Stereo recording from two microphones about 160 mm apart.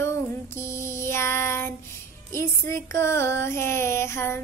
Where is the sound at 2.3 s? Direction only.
15° left (ahead or behind).